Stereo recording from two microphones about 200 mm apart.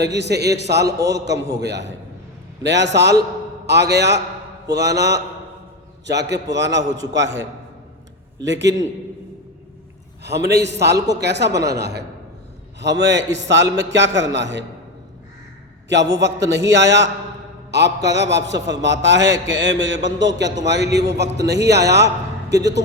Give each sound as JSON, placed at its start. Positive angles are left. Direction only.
{"t": 0.0, "sound": "a man's voice", "side_deg": -60}
{"t": 0.9, "sound": "a man's voice", "side_deg": -15}
{"t": 1.1, "sound": "a man's voice", "side_deg": -60}
{"t": 10.2, "sound": "a man's voice", "side_deg": -55}
{"t": 16.5, "sound": "a man's voice", "side_deg": -60}